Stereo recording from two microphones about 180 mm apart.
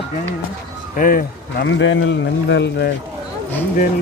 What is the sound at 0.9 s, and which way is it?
Speech, 50° left (ahead or behind).